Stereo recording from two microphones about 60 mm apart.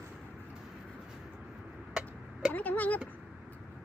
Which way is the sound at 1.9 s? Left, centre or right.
Centre.